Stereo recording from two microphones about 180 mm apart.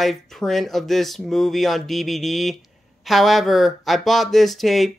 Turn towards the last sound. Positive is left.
turn(degrees=0)  # may be behind; listen again after turning